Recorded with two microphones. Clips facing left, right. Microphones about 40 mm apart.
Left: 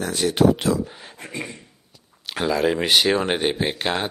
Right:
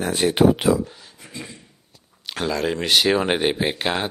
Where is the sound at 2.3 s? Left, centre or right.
Centre.